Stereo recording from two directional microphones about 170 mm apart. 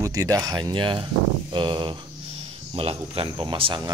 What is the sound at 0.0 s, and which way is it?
Speech, 20° right (ahead or behind).